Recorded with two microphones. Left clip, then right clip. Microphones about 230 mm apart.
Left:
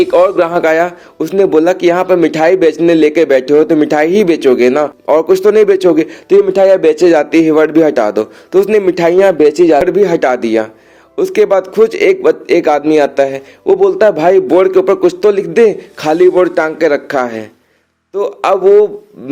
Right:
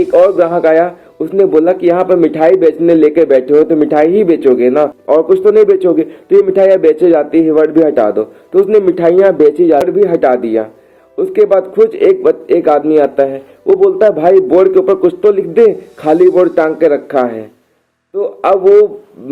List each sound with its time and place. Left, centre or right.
0.0 s a man's voice: left